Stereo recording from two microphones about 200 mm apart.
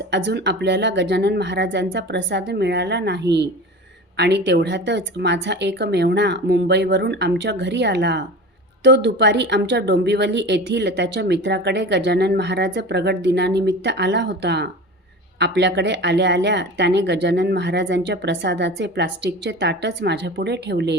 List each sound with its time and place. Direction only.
0.1 s speech: 55° right (ahead or behind)